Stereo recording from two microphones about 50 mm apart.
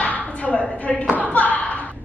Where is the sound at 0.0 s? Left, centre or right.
Left.